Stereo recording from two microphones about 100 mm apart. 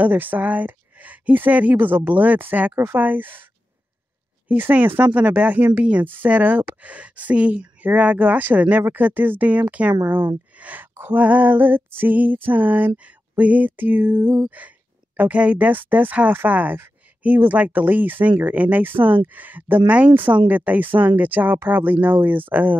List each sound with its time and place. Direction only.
0.0 s speech: 20° right (ahead or behind)
4.5 s speech: 15° right (ahead or behind)